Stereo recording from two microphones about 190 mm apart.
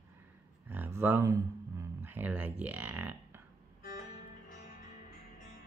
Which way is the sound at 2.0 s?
10° right (ahead or behind).